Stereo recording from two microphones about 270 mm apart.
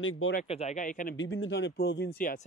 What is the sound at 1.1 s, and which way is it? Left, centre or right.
Speech, left.